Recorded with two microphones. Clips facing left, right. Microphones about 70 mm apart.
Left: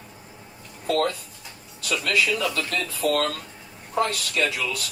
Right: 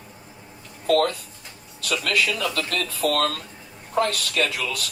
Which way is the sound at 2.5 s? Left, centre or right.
Right.